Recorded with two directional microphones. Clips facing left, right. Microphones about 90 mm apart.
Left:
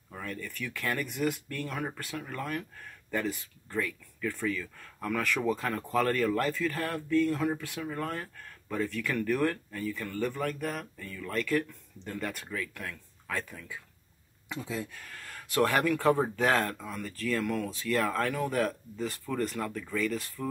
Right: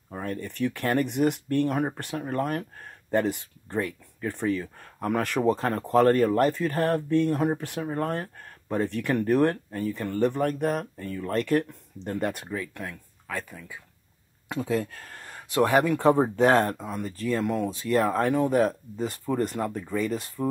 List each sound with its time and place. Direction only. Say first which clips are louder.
0.1 s speech: right 6 dB; 35° right (ahead or behind)
6.9 s speech: right 2 dB; 30° right (ahead or behind)
12.4 s speech: right 4 dB; 25° right (ahead or behind)
13.3 s speech: right 1 dB; 10° right (ahead or behind)
14.5 s speech: right 9 dB; 55° right (ahead or behind)
15.0 s speech: right 2 dB; 30° right (ahead or behind)